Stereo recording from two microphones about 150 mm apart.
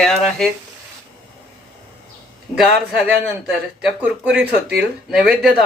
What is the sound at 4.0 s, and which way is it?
Speech, 5° right (ahead or behind).